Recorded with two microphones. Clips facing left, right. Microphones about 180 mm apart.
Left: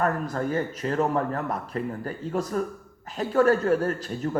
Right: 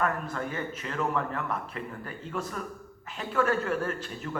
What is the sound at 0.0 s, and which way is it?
Speech, 40° left (ahead or behind).